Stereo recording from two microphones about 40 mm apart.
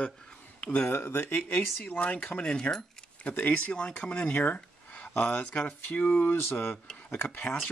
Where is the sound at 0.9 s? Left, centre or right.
Left.